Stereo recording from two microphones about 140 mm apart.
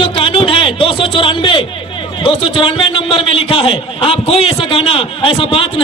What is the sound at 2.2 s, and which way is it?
A man's voice, 40° left (ahead or behind).